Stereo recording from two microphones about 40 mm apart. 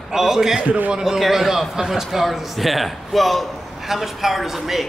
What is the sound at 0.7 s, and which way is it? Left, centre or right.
Speech, right.